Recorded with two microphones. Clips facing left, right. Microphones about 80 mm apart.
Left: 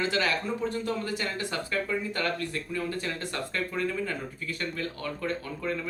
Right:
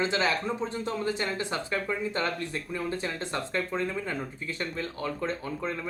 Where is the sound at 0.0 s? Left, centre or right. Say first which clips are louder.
Right 1 dB; right.